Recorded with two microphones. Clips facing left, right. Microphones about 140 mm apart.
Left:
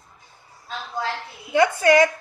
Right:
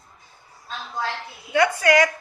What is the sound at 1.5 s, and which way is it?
Speech, 25° left (ahead or behind).